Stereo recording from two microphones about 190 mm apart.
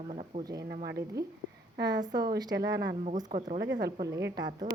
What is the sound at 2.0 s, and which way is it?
Speech, 45° right (ahead or behind).